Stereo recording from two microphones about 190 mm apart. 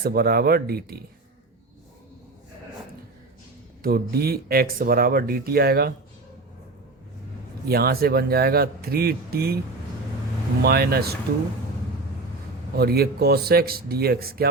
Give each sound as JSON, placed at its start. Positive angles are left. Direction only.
{"t": 0.0, "sound": "speech", "side_deg": -55}
{"t": 3.8, "sound": "speech", "side_deg": -55}
{"t": 7.7, "sound": "speech", "side_deg": -55}
{"t": 10.6, "sound": "speech", "side_deg": -55}
{"t": 12.7, "sound": "speech", "side_deg": -55}